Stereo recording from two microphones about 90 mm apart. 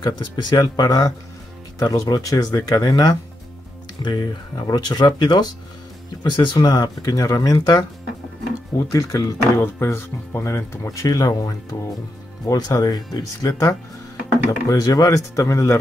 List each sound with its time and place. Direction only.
0.0 s speech: 50° left (ahead or behind)
9.6 s speech: 30° left (ahead or behind)